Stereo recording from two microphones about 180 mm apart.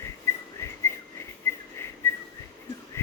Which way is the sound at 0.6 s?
15° left (ahead or behind).